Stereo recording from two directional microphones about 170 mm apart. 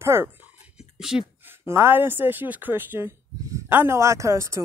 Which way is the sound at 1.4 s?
15° right (ahead or behind).